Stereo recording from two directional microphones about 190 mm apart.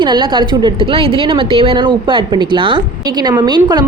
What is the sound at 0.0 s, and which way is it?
Speech, 25° right (ahead or behind).